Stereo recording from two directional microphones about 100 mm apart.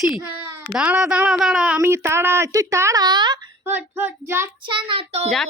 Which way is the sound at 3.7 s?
20° right (ahead or behind).